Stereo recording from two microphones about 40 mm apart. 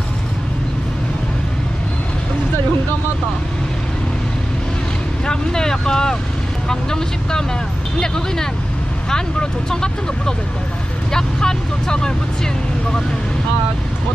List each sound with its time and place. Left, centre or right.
5.2 s vehicle: centre
6.7 s speech: centre
9.1 s speech: centre